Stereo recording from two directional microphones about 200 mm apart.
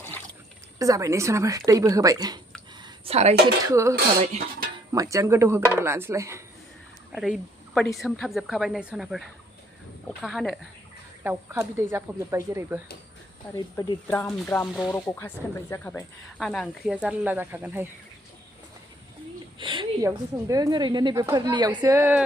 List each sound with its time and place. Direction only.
0.8 s speech: 15° right (ahead or behind)
2.8 s a sound: 30° right (ahead or behind)
3.4 s speech: 15° right (ahead or behind)
7.1 s speech: centre (ahead or behind)
11.2 s speech: 10° right (ahead or behind)
13.7 s speech: 20° left (ahead or behind)
14.1 s speech: 5° left (ahead or behind); by 17.8 s 10° right (ahead or behind)
19.5 s a woman's voice: 25° right (ahead or behind)